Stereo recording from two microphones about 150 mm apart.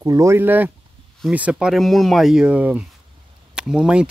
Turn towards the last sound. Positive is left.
turn(degrees=-5)  # may be behind; listen again after turning